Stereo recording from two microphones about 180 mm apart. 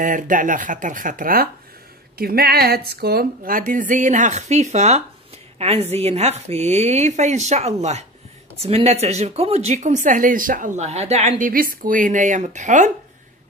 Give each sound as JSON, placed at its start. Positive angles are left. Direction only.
{"t": 0.0, "sound": "a woman's voice", "side_deg": -45}